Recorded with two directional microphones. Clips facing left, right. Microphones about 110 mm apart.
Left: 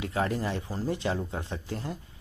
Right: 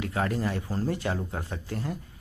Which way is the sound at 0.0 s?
25° left (ahead or behind).